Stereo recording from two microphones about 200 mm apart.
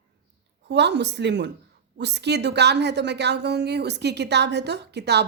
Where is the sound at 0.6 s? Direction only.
60° right (ahead or behind).